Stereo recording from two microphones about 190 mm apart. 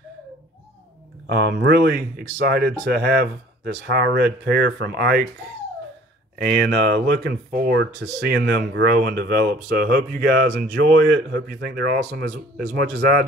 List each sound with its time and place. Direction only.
1.2 s speech: 60° right (ahead or behind)
6.6 s speech: 60° right (ahead or behind)